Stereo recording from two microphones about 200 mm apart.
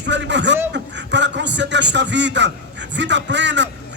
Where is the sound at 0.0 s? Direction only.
60° right (ahead or behind).